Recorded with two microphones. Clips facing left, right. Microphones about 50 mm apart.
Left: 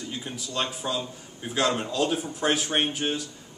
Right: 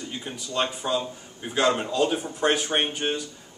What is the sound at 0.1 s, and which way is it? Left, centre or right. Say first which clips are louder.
A man's voice: right 2 dB; centre.